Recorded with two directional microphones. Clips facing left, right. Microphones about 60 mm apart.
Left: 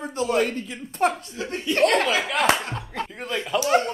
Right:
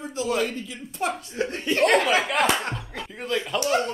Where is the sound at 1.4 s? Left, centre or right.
Right.